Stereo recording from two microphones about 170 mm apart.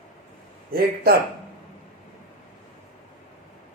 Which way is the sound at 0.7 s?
65° right (ahead or behind).